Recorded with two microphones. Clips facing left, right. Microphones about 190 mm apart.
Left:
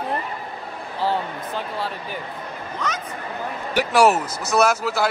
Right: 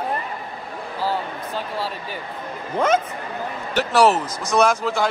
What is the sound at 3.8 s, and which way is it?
A man's voice, 10° left (ahead or behind).